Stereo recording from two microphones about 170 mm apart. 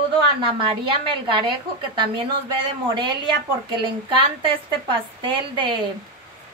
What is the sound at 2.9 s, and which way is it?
A woman's voice, 30° right (ahead or behind).